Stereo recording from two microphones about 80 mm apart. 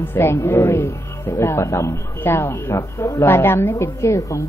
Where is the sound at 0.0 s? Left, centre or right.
Left.